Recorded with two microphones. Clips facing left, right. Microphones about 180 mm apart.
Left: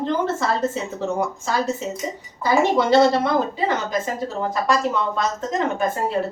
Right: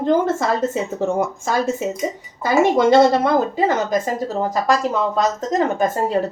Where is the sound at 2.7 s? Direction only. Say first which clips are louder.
Right 3 dB; 50° right (ahead or behind).